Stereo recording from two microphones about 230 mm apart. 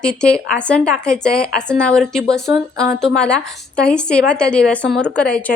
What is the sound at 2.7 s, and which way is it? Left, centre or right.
Speech, centre.